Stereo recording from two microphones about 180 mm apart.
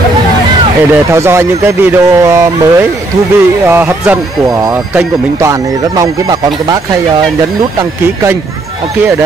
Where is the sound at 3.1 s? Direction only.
40° right (ahead or behind).